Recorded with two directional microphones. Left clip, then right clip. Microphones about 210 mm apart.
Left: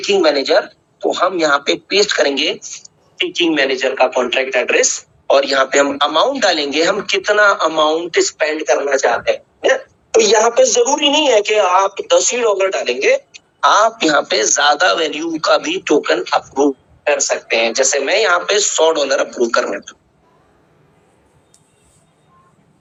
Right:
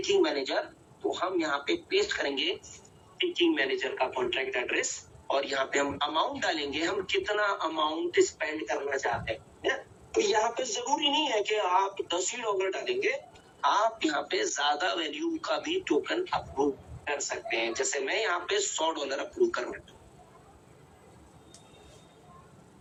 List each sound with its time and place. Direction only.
0.1 s a man's voice: 45° left (ahead or behind)